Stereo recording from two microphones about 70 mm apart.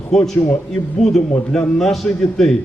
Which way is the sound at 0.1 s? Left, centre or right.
Centre.